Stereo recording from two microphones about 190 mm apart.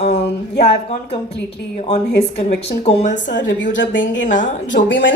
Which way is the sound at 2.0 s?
60° left (ahead or behind).